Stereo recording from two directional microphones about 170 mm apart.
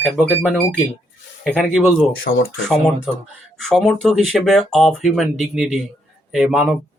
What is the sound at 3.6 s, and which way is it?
Speech, centre (ahead or behind).